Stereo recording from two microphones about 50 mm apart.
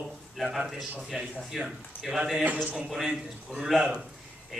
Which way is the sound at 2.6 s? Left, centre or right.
Centre.